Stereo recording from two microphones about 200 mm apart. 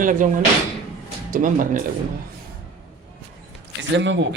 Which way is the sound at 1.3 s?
40° right (ahead or behind).